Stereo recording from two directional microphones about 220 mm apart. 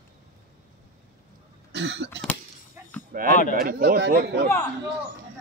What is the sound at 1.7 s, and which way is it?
Cough, 55° right (ahead or behind).